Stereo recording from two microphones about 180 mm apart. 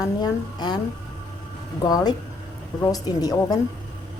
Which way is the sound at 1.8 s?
20° left (ahead or behind).